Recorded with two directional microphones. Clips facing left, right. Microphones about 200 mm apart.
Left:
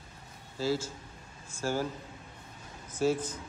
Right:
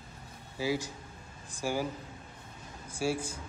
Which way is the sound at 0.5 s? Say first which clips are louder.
Left 1 dB; 15° right (ahead or behind).